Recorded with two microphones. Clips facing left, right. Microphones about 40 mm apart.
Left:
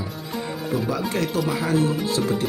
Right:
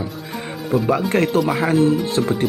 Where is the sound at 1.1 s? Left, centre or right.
Right.